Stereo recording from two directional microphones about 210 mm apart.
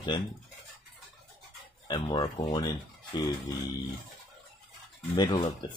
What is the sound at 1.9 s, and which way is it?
Speech, 20° left (ahead or behind).